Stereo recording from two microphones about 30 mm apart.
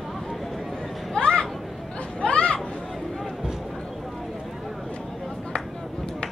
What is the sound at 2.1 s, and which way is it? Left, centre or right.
Chatter, left.